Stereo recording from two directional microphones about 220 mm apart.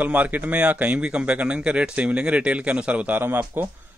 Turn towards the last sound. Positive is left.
turn(degrees=-10)  # may be behind; listen again after turning